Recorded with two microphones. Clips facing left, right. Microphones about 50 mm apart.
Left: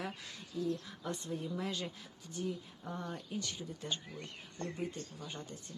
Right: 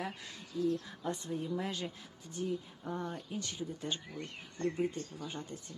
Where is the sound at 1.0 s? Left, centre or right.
Centre.